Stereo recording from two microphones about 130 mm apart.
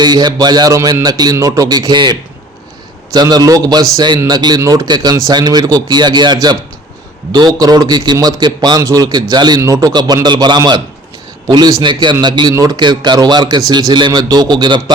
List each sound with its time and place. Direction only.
0.0 s a man's voice: 30° right (ahead or behind)